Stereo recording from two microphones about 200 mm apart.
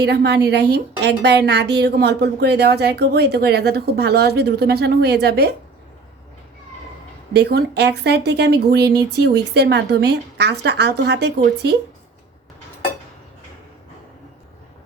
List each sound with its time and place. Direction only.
0.0 s a woman's voice: 55° right (ahead or behind)
7.3 s a woman's voice: 55° right (ahead or behind)